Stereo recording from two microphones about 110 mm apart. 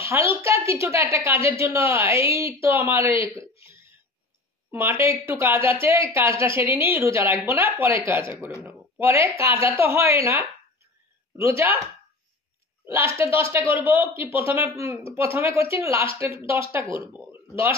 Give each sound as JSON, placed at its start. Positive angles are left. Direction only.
{"t": 0.0, "sound": "a sound", "side_deg": -20}
{"t": 1.1, "sound": "a woman's voice", "side_deg": -25}
{"t": 4.6, "sound": "a woman's voice", "side_deg": -20}
{"t": 11.3, "sound": "a woman's voice", "side_deg": -25}
{"t": 12.8, "sound": "a woman's voice", "side_deg": -25}
{"t": 17.3, "sound": "a sound", "side_deg": -25}